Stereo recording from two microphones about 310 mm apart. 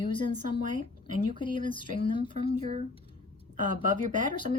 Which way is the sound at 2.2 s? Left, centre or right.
Centre.